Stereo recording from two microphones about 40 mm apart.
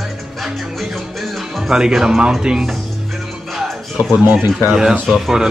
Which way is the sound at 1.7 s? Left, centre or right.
Centre.